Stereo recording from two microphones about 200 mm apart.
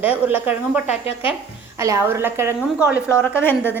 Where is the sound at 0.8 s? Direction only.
30° left (ahead or behind).